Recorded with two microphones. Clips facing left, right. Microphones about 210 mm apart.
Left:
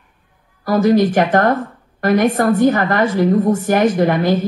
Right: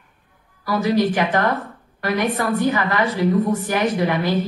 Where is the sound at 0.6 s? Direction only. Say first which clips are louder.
Left 6 dB; 45° left (ahead or behind).